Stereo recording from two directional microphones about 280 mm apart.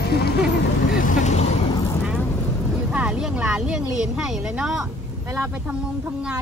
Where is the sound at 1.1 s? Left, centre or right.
Left.